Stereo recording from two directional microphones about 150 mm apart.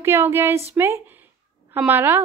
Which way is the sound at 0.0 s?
15° right (ahead or behind).